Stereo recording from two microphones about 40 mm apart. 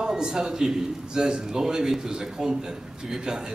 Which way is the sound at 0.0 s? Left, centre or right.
Centre.